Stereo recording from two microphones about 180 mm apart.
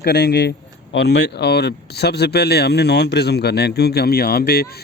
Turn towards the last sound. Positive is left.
turn(degrees=60)  # may be behind; listen again after turning